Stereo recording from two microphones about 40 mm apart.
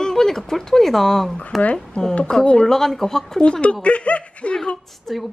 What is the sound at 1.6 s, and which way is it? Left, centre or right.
Speech, left.